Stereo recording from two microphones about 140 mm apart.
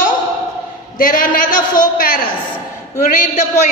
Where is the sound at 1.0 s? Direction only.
80° left.